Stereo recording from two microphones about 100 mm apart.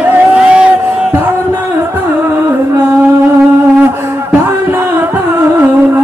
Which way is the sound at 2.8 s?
25° right (ahead or behind).